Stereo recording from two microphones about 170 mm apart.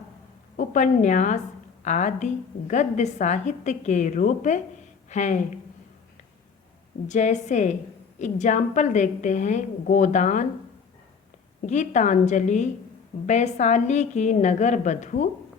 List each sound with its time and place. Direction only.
0.5 s a woman's voice: 50° left (ahead or behind)
7.1 s a woman's voice: 45° left (ahead or behind)
11.6 s a woman's voice: 45° left (ahead or behind)